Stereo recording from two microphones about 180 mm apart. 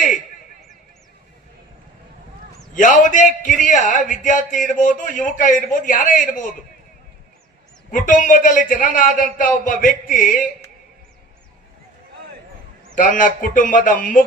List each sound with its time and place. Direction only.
2.7 s a man's voice: 45° left (ahead or behind)
7.9 s a man's voice: 45° left (ahead or behind)
13.0 s a man's voice: 50° left (ahead or behind)